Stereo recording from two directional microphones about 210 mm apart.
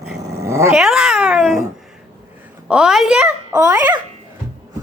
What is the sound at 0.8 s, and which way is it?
Cat, centre (ahead or behind).